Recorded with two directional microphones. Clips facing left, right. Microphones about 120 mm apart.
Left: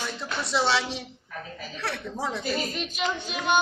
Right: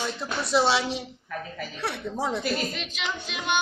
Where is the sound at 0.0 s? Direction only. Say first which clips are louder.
Right 2 dB; 15° right (ahead or behind).